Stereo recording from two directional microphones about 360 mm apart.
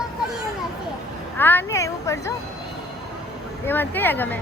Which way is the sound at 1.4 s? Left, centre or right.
Centre.